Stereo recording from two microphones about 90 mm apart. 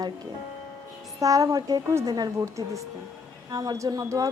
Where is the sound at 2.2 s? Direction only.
45° right (ahead or behind).